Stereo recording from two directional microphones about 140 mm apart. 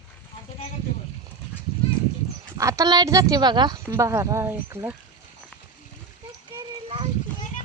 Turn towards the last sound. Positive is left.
turn(degrees=-40)  # may be behind; listen again after turning